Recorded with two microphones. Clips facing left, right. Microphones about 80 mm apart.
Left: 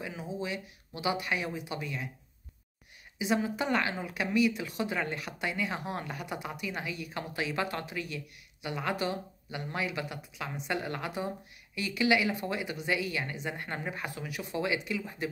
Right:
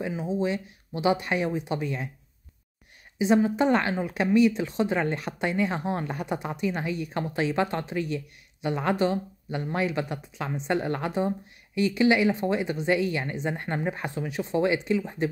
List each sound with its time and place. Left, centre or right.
0.0 s speech: right
3.2 s speech: right